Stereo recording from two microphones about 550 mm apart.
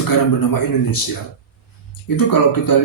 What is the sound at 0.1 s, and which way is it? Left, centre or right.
Speech, left.